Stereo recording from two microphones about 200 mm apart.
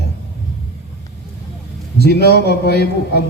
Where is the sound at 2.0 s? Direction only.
55° left (ahead or behind).